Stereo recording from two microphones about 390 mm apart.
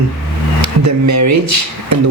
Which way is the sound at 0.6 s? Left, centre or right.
Right.